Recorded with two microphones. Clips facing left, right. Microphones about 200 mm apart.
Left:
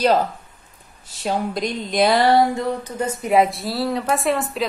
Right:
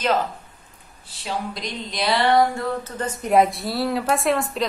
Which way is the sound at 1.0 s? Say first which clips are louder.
Left 5 dB; 50° left (ahead or behind).